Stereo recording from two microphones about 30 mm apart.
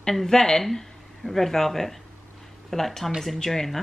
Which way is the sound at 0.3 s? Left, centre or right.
Centre.